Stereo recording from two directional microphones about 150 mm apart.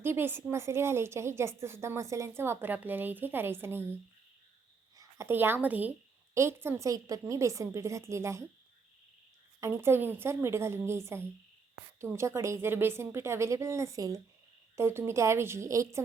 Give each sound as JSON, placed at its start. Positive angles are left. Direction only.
{"t": 0.0, "sound": "a woman's voice", "side_deg": -15}
{"t": 4.9, "sound": "a woman's voice", "side_deg": -20}
{"t": 9.6, "sound": "a woman's voice", "side_deg": -20}